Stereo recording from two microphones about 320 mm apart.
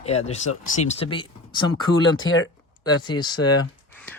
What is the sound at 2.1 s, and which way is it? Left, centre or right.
Speech, left.